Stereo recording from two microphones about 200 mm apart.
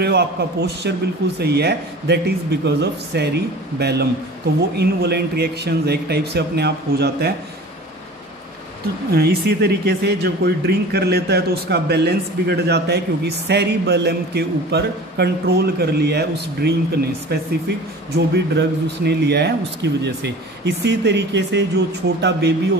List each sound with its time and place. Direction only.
0.0 s speech: 55° right (ahead or behind)
9.1 s speech: 55° right (ahead or behind)